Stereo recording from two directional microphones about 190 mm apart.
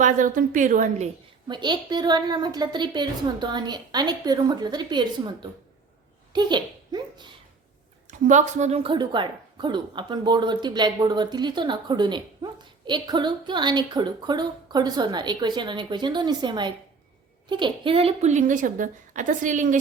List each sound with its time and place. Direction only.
0.0 s a woman's voice: 45° right (ahead or behind)
1.5 s a woman's voice: 25° right (ahead or behind)
8.0 s a woman's voice: 40° right (ahead or behind)